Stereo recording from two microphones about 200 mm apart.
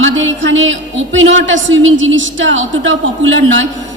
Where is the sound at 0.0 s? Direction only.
70° right (ahead or behind).